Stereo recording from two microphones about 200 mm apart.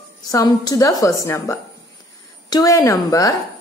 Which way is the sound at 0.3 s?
20° left (ahead or behind).